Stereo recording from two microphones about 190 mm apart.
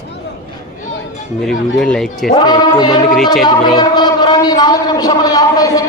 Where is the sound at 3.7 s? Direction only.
20° left (ahead or behind).